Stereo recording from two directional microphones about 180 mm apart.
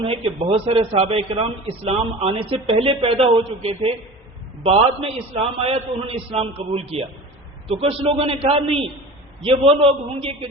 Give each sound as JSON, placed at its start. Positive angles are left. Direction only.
{"t": 0.0, "sound": "a man's voice", "side_deg": -30}